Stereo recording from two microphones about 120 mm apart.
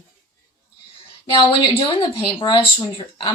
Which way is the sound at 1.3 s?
45° left (ahead or behind).